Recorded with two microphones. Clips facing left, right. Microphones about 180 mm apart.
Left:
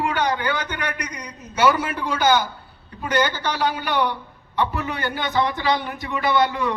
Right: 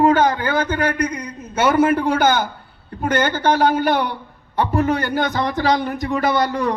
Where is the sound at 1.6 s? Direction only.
50° right (ahead or behind).